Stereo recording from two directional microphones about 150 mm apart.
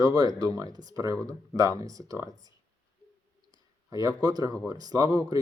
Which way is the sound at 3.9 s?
25° right (ahead or behind).